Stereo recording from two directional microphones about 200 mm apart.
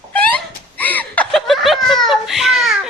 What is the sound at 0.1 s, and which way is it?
Laughter, 10° left (ahead or behind).